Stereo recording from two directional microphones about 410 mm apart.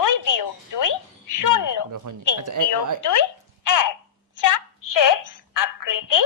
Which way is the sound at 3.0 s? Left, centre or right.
Left.